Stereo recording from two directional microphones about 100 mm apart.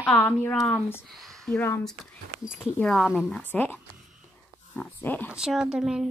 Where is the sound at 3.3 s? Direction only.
15° left (ahead or behind).